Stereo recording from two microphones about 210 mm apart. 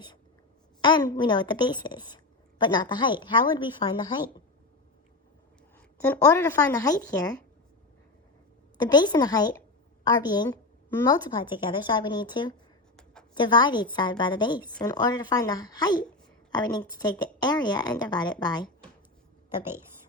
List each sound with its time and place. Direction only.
0.8 s a woman's voice: 20° left (ahead or behind)
6.0 s speech: 10° left (ahead or behind)
8.8 s speech: 20° left (ahead or behind)